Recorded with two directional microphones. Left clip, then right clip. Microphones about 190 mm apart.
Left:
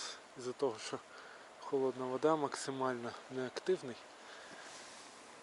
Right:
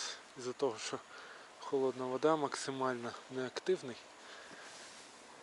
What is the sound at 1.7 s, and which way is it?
Speech, 25° left (ahead or behind).